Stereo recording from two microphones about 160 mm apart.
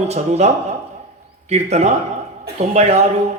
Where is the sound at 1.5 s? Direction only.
45° right (ahead or behind).